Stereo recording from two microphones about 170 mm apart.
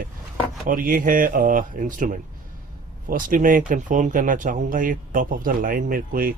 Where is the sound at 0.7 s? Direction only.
55° right (ahead or behind).